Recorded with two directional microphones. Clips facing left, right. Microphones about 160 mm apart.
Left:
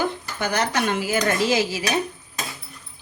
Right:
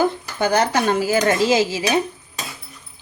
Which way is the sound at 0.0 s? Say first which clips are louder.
Right 6 dB; 30° right (ahead or behind).